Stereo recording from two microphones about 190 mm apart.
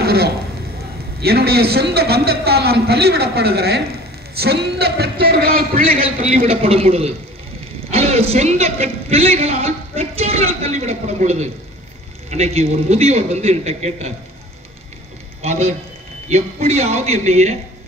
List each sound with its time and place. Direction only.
0.0 s honk: 55° right (ahead or behind)
1.2 s a man's voice: 55° right (ahead or behind)
6.0 s a man's voice: 30° right (ahead or behind)
15.4 s a man's voice: 35° right (ahead or behind)